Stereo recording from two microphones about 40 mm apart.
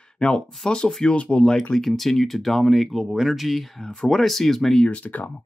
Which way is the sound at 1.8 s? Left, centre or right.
Centre.